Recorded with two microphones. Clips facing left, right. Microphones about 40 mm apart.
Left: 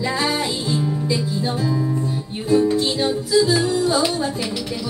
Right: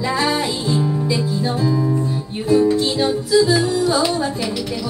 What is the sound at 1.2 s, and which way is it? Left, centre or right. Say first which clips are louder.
Music: right 3 dB; centre.